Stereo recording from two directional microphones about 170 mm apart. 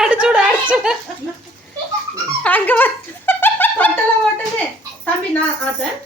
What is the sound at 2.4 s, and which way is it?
Dog, 10° left (ahead or behind).